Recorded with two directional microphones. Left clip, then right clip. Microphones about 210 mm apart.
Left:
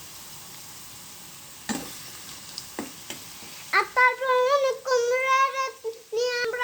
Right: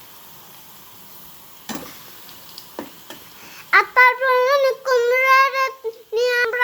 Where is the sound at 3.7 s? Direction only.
20° right (ahead or behind).